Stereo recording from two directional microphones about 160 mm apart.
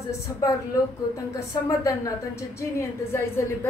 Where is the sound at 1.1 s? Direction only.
20° left (ahead or behind).